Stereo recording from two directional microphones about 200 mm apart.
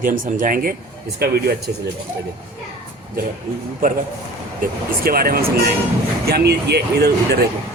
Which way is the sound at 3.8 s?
45° right (ahead or behind).